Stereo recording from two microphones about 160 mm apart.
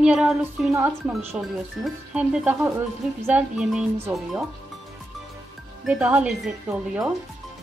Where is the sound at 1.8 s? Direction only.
5° right (ahead or behind).